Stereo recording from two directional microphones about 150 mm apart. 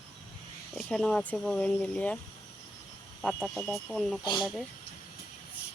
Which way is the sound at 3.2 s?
Centre (ahead or behind).